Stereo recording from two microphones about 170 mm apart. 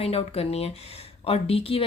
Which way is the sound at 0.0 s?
35° left (ahead or behind).